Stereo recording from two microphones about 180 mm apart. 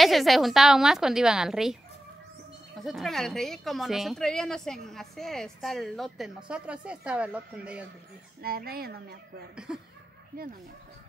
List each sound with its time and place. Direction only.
0.0 s a woman's voice: centre (ahead or behind)
8.4 s speech: 55° right (ahead or behind)